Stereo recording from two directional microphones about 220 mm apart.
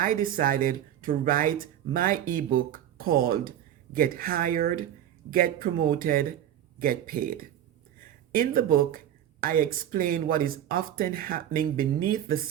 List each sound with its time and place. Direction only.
0.0 s speech: 40° right (ahead or behind)